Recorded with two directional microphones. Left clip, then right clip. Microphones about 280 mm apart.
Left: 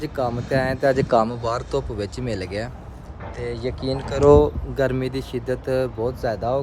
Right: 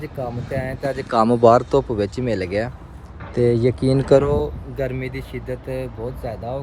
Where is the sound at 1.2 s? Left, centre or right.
Centre.